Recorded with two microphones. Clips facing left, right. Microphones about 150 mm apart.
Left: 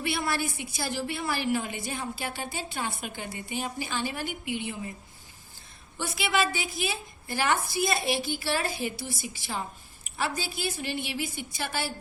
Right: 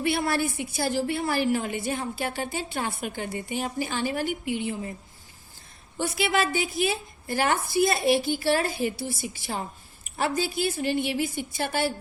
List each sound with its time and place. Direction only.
0.0 s a woman's voice: 45° right (ahead or behind)
6.0 s a woman's voice: 45° right (ahead or behind)